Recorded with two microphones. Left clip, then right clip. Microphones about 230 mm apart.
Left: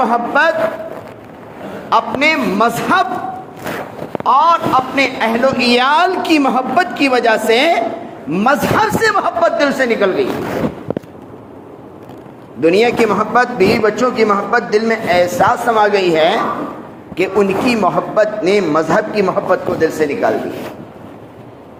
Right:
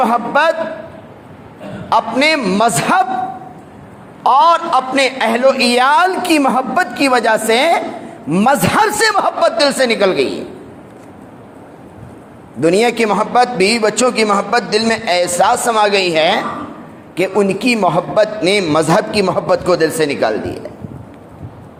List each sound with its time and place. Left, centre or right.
0.0 s a sound: right
1.9 s a man's voice: right
4.2 s a man's voice: right
12.5 s a man's voice: right